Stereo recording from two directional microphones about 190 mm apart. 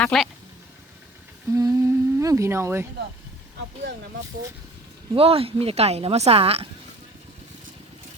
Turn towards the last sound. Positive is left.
turn(degrees=-30)  # may be behind; listen again after turning